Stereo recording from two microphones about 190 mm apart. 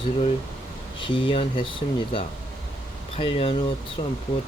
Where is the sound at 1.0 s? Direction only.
25° left (ahead or behind).